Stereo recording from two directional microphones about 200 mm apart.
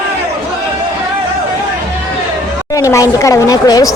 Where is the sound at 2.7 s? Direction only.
15° left (ahead or behind).